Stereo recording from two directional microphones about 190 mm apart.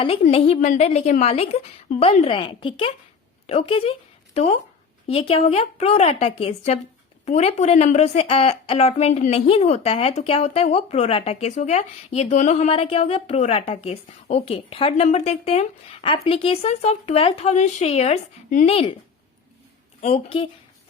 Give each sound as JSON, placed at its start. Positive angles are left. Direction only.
{"t": 0.0, "sound": "a woman's voice", "side_deg": 30}
{"t": 20.0, "sound": "a woman's voice", "side_deg": 30}